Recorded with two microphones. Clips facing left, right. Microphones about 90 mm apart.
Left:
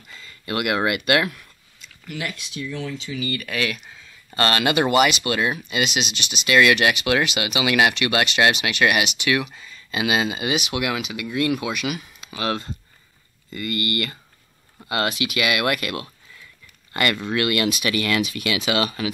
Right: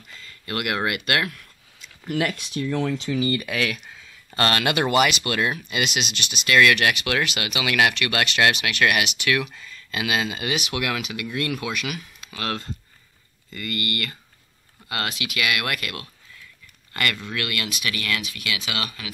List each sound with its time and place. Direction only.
0.1 s speech: 20° left (ahead or behind)
2.0 s speech: 50° right (ahead or behind)
3.2 s speech: 30° right (ahead or behind)
3.4 s speech: centre (ahead or behind); by 19.0 s 25° left (ahead or behind)